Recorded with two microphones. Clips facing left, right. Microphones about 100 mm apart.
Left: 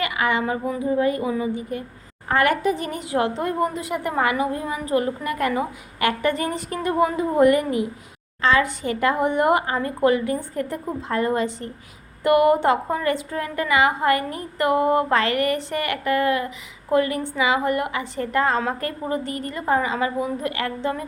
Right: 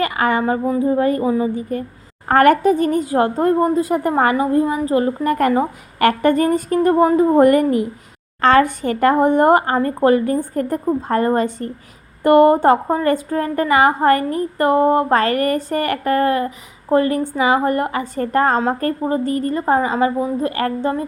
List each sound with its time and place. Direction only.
0.0 s a woman's voice: 40° right (ahead or behind)
2.2 s a woman's voice: 50° right (ahead or behind); by 5.3 s 30° right (ahead or behind)
5.3 s a woman's voice: 45° right (ahead or behind)